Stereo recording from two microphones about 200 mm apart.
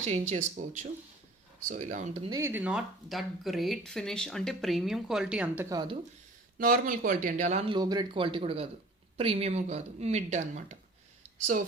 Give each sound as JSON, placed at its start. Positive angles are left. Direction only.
{"t": 0.0, "sound": "speech", "side_deg": -35}
{"t": 2.3, "sound": "speech", "side_deg": -10}
{"t": 6.6, "sound": "speech", "side_deg": -45}